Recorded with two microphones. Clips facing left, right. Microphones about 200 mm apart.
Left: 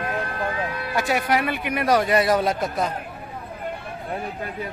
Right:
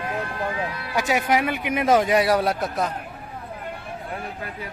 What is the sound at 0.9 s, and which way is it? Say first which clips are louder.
A man's voice: right 1 dB; 15° right (ahead or behind).